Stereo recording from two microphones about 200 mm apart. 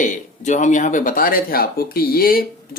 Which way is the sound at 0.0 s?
40° left (ahead or behind).